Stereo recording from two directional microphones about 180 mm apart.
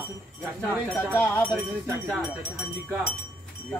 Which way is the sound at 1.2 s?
10° left (ahead or behind).